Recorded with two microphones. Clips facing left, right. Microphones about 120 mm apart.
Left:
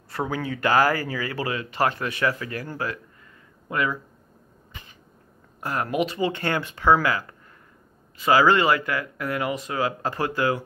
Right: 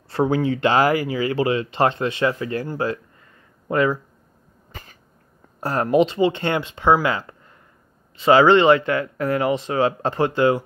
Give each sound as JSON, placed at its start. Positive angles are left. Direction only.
{"t": 0.1, "sound": "speech", "side_deg": -25}
{"t": 4.7, "sound": "cat", "side_deg": -40}
{"t": 5.6, "sound": "speech", "side_deg": -30}